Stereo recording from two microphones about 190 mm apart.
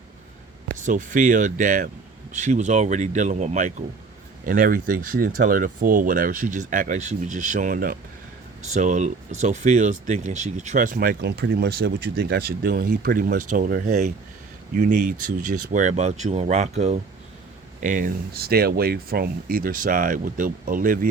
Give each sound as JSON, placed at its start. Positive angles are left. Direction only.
{"t": 0.9, "sound": "speech", "side_deg": -40}